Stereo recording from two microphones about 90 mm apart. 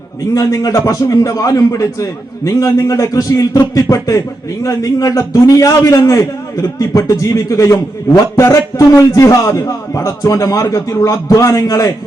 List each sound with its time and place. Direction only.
0.3 s a man's voice: 40° left (ahead or behind)